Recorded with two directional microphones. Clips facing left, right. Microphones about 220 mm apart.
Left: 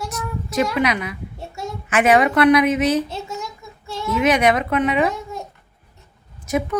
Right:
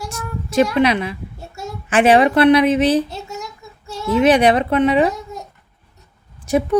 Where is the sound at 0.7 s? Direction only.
30° right (ahead or behind).